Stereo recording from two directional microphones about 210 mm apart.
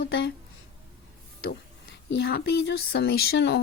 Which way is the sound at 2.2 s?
50° left (ahead or behind).